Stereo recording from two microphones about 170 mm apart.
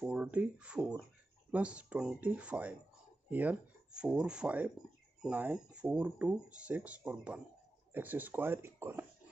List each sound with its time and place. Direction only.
0.0 s speech: 5° right (ahead or behind)